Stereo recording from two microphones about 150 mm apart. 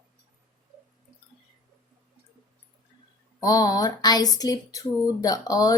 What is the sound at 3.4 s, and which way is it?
Speech, 25° left (ahead or behind).